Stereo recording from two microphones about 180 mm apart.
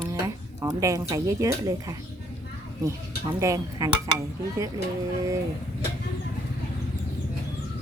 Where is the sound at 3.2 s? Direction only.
20° right (ahead or behind).